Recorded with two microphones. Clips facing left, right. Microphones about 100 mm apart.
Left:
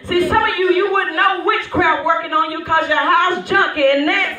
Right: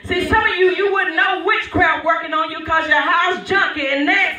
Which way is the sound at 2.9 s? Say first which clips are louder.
Left 1 dB; 50° left (ahead or behind).